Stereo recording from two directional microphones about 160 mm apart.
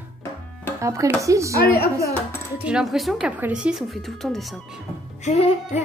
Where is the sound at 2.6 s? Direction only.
Centre (ahead or behind).